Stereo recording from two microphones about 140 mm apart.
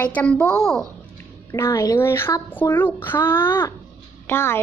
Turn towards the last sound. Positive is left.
turn(degrees=15)  # may be behind; listen again after turning